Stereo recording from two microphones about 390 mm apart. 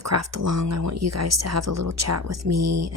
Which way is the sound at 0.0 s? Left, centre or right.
Right.